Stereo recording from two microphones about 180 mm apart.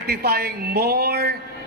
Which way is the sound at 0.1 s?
60° right (ahead or behind).